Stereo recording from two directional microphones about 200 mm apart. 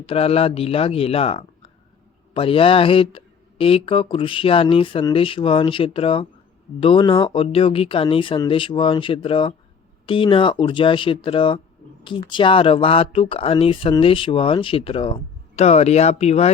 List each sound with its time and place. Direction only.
0.0 s speech: 30° left (ahead or behind)